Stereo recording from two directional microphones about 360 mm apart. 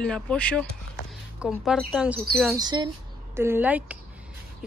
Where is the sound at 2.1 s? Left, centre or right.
Right.